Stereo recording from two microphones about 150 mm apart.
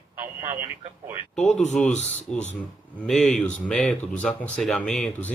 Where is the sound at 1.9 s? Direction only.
50° left (ahead or behind).